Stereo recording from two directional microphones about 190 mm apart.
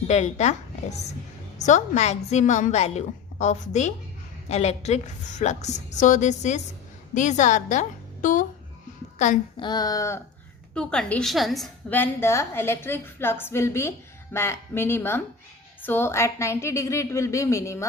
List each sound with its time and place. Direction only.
0.1 s a woman's voice: 35° left (ahead or behind)
9.6 s speech: 20° left (ahead or behind)
10.8 s a woman's voice: 5° left (ahead or behind)